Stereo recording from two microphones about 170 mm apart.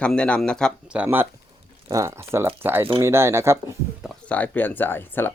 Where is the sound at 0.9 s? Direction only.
10° right (ahead or behind).